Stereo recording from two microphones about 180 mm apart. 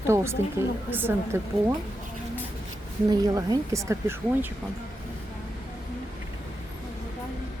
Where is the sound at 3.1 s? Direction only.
20° right (ahead or behind).